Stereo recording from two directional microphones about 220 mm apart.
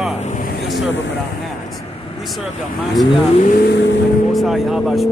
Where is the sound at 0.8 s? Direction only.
55° left (ahead or behind).